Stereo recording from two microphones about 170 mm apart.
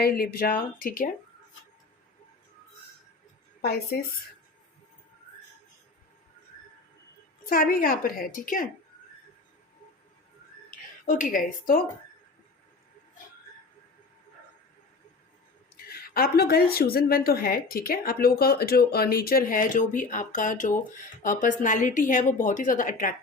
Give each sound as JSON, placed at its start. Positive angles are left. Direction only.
{"t": 0.0, "sound": "a woman's voice", "side_deg": 65}
{"t": 7.4, "sound": "a woman's voice", "side_deg": 55}
{"t": 11.0, "sound": "a woman's voice", "side_deg": 50}
{"t": 15.9, "sound": "a woman's voice", "side_deg": 65}